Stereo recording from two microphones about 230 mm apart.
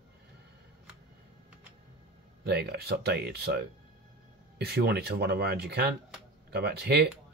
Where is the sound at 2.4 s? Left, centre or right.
Right.